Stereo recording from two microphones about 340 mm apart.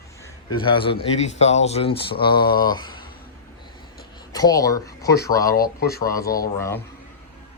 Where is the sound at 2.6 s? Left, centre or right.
Centre.